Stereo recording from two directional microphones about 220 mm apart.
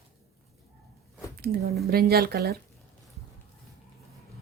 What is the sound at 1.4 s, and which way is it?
Speech, 45° right (ahead or behind).